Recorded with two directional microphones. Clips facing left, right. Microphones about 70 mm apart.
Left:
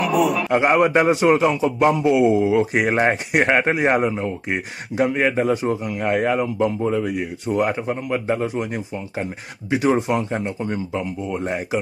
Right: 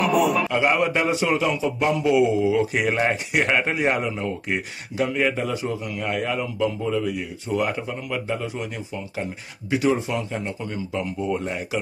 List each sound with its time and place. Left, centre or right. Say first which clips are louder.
0.0 s a man's voice: left 1 dB; centre
0.5 s a man's voice: left 4 dB; left
2.2 s a man's voice: left 3 dB; left
4.1 s speech: left 2 dB; left
4.9 s a man's voice: left 4 dB; left
11.3 s a man's voice: left 3 dB; left